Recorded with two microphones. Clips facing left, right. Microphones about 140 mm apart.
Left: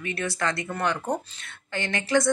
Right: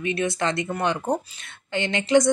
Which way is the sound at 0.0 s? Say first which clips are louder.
Right 4 dB; 20° right (ahead or behind).